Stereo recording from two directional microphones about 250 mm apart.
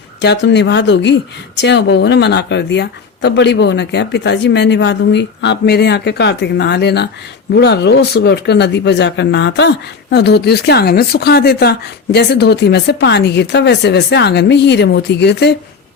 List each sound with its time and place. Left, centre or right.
0.2 s a woman's voice: left